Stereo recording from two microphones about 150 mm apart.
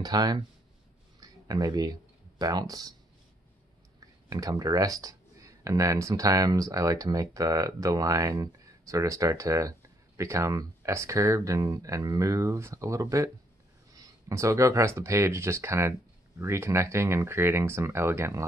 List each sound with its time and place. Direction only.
0.0 s speech: 25° right (ahead or behind)
4.3 s speech: 25° right (ahead or behind)